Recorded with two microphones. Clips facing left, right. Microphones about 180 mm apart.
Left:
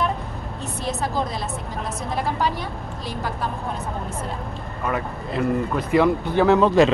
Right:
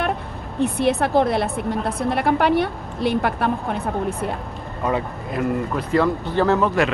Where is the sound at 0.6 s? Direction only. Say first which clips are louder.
Right 9 dB; 60° right (ahead or behind).